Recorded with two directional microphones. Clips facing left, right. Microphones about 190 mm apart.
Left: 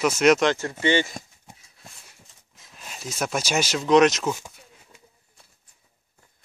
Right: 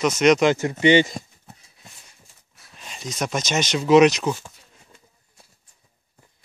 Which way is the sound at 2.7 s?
5° left (ahead or behind).